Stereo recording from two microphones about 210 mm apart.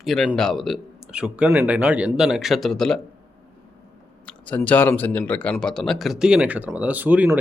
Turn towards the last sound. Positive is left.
turn(degrees=-10)  # may be behind; listen again after turning